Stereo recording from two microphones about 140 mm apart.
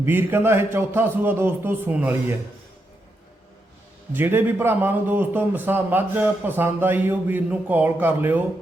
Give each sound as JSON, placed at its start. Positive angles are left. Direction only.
{"t": 0.0, "sound": "a man's voice", "side_deg": -15}
{"t": 4.1, "sound": "a man's voice", "side_deg": -15}